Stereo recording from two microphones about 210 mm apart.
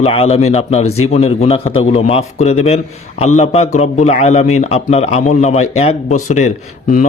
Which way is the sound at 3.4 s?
35° left (ahead or behind).